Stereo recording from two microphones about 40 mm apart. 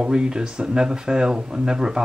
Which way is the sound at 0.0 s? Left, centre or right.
Right.